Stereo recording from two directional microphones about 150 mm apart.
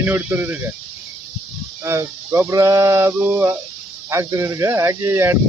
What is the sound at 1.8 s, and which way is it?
Speech, 15° right (ahead or behind).